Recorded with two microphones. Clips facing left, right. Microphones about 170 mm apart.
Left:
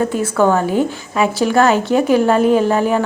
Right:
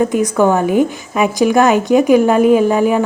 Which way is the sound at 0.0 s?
15° right (ahead or behind).